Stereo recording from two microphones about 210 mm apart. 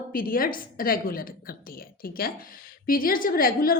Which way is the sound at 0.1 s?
45° left (ahead or behind).